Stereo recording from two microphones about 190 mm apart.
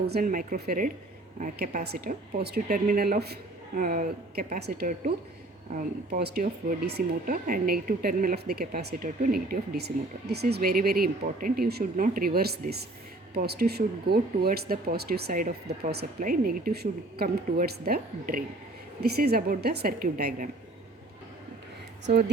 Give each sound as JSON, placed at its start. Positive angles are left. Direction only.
{"t": 0.1, "sound": "speech", "side_deg": -45}